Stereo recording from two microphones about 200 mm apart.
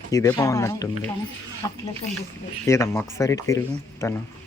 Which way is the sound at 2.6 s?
15° left (ahead or behind).